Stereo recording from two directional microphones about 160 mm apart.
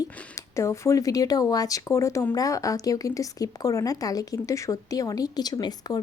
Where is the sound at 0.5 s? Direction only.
20° left (ahead or behind).